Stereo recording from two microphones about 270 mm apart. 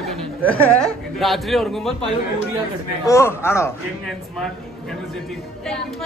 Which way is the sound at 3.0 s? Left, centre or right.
Centre.